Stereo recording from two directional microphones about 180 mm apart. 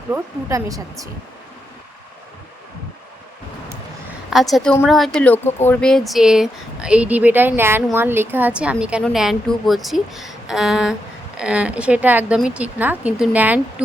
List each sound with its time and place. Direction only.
0.1 s speech: 15° right (ahead or behind)
4.3 s a woman's voice: centre (ahead or behind)